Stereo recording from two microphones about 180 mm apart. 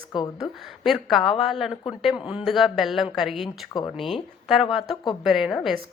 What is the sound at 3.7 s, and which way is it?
Speech, 25° left (ahead or behind).